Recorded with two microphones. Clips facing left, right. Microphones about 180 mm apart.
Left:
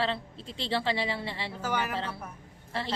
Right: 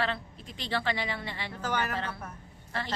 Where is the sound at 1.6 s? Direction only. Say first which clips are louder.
Even; 10° left (ahead or behind).